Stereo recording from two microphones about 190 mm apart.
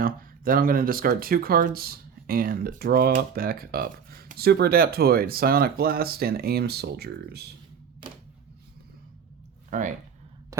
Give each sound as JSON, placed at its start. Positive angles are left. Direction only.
{"t": 0.0, "sound": "speech", "side_deg": -50}
{"t": 9.6, "sound": "speech", "side_deg": -40}
{"t": 10.5, "sound": "a sound", "side_deg": -15}